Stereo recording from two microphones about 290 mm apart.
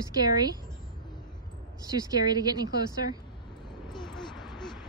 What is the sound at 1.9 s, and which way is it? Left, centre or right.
Speech, centre.